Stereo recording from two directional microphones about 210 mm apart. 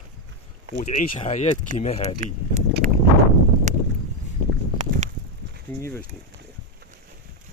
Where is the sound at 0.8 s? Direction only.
35° left (ahead or behind).